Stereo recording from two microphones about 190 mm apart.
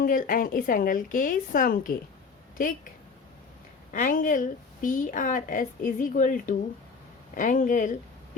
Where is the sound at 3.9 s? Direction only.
45° left (ahead or behind).